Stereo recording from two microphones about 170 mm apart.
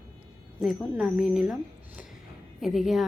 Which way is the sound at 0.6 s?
5° right (ahead or behind).